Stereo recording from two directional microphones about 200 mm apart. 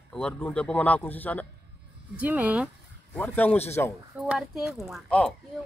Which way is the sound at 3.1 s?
10° left (ahead or behind).